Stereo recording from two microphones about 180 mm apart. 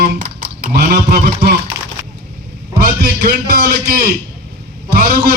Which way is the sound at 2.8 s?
55° right (ahead or behind).